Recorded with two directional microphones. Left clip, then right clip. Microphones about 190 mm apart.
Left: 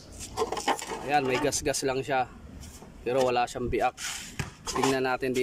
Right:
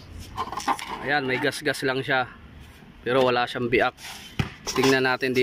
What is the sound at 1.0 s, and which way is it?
Speech, 10° left (ahead or behind).